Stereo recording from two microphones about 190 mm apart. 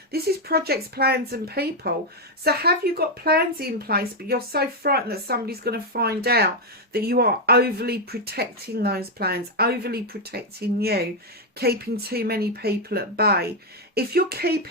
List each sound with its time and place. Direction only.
0.1 s speech: 55° right (ahead or behind)